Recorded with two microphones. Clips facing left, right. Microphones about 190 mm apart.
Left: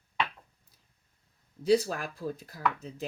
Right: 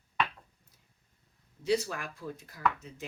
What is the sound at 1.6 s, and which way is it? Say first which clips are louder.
Speech: left 5 dB; 35° left (ahead or behind).